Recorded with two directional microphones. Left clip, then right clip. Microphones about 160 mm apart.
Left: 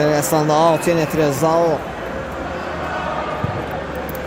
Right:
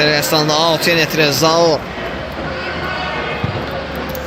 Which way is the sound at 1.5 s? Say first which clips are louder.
Right 3 dB; centre (ahead or behind).